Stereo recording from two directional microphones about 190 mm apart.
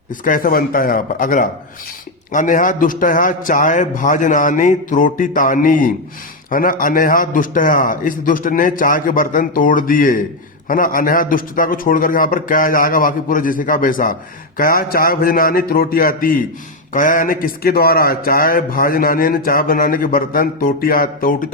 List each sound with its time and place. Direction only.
0.1 s a man's voice: 45° left (ahead or behind)